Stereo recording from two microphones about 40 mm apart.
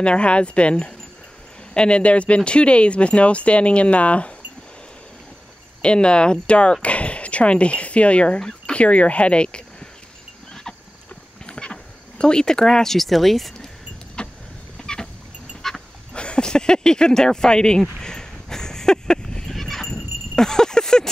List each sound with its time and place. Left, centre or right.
0.0 s speech: left
5.8 s speech: left
8.4 s chicken: centre
8.7 s speech: left
11.4 s speech: left; by 13.7 s centre
14.2 s vehicle: left
16.1 s speech: left
18.0 s a sound: centre